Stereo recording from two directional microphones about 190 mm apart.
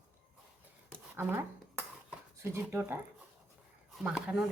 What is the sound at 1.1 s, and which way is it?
Speech, 10° right (ahead or behind).